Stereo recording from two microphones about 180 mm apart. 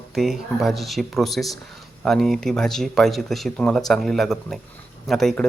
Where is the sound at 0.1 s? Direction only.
Centre (ahead or behind).